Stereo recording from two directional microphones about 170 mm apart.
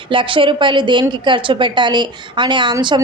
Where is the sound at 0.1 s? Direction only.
30° right (ahead or behind).